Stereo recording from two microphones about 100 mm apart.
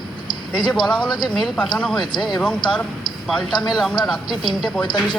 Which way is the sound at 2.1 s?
45° left (ahead or behind).